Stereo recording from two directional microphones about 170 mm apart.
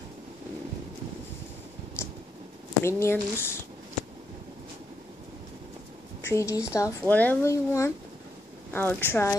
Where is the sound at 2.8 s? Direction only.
15° left (ahead or behind).